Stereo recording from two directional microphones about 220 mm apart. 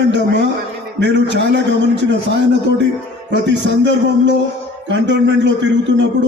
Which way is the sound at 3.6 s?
55° right (ahead or behind).